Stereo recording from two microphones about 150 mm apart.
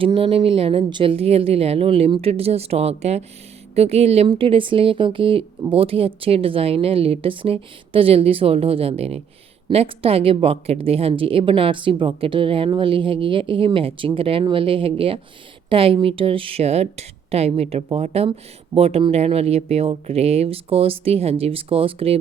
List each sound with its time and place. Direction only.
0.0 s speech: 35° right (ahead or behind)